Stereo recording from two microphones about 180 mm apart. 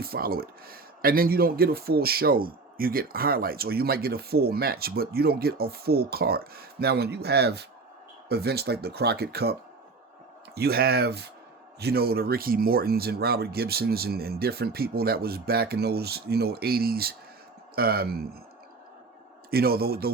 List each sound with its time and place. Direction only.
0.0 s speech: 55° right (ahead or behind)
19.5 s speech: 60° right (ahead or behind)